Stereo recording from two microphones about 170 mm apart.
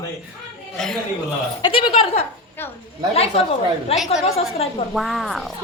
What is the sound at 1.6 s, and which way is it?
Speech, 30° left (ahead or behind).